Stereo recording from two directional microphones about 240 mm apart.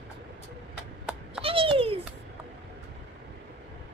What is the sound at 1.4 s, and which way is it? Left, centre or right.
Speech, right.